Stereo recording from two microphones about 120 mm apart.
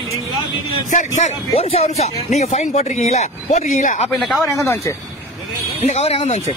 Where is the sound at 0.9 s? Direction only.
85° left.